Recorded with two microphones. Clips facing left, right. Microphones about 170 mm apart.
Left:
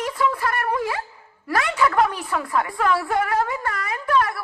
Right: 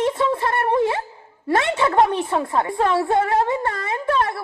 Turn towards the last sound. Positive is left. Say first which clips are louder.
# right 1 dB
turn(degrees=-25)  # may be behind; listen again after turning